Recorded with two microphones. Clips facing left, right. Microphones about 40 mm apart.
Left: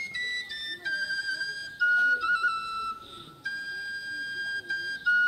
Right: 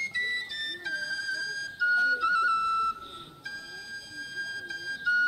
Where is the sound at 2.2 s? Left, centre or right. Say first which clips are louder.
Right 1 dB; centre.